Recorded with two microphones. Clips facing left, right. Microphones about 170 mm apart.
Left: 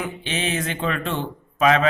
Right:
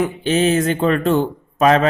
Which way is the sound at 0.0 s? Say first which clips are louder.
Right 10 dB; 40° right (ahead or behind).